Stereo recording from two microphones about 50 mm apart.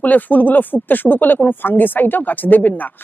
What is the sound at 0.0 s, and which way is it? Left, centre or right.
Speech, left.